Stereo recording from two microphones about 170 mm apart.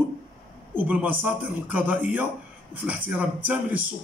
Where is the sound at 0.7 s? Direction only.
10° right (ahead or behind).